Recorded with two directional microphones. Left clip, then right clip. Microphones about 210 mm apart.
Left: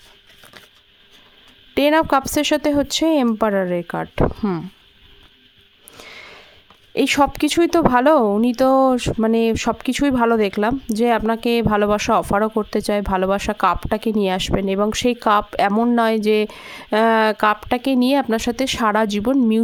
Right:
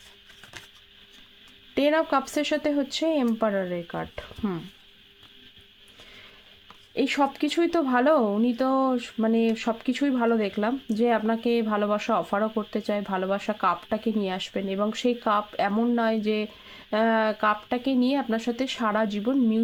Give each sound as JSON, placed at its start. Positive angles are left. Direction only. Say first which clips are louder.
{"t": 1.7, "sound": "speech", "louder": "left 7 dB", "side_deg": 35}
{"t": 6.9, "sound": "speech", "louder": "left 8 dB", "side_deg": 45}